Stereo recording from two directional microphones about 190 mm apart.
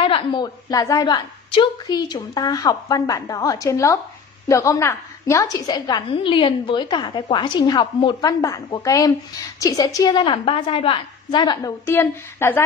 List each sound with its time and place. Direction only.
0.0 s a woman's voice: 25° left (ahead or behind)